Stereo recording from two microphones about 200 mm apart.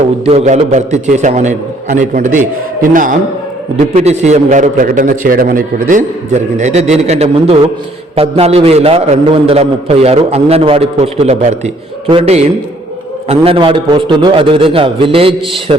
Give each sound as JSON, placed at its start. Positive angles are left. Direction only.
{"t": 0.3, "sound": "a man's voice", "side_deg": -30}